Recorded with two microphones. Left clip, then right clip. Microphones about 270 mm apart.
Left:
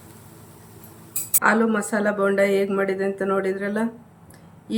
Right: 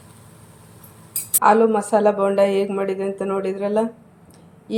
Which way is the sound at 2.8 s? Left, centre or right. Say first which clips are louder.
Even; left.